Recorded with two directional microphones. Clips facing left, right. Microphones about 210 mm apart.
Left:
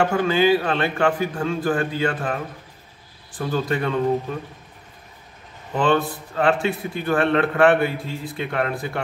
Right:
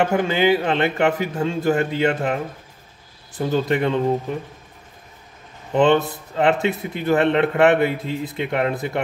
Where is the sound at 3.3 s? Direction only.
20° right (ahead or behind).